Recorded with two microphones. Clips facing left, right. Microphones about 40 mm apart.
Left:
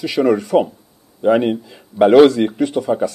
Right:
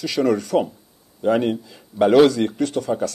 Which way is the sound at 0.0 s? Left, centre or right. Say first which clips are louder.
Left 4 dB; centre.